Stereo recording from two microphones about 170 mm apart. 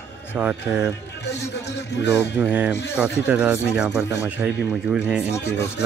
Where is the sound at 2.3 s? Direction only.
5° right (ahead or behind).